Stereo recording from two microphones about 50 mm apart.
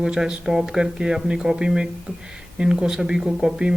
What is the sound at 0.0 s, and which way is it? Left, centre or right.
Speech, centre.